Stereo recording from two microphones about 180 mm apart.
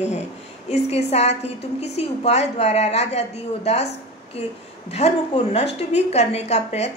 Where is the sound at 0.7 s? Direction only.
35° left (ahead or behind).